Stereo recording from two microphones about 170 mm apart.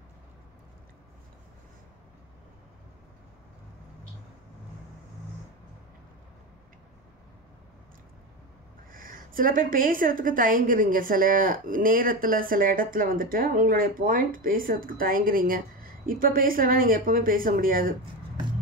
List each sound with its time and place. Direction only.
8.9 s a woman's voice: 55° right (ahead or behind)